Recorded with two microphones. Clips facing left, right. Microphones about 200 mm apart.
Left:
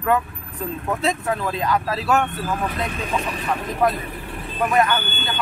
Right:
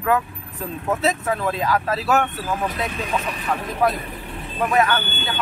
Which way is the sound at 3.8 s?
5° right (ahead or behind).